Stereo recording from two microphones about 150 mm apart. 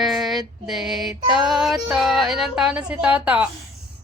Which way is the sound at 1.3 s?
Centre (ahead or behind).